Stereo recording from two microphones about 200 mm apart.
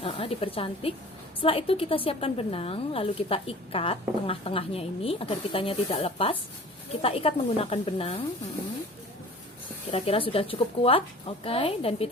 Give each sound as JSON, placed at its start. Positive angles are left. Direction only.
{"t": 0.0, "sound": "speech", "side_deg": 30}
{"t": 9.9, "sound": "speech", "side_deg": 25}